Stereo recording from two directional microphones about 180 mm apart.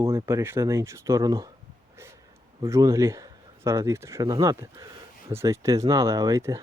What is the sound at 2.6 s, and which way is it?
Speech, 15° right (ahead or behind).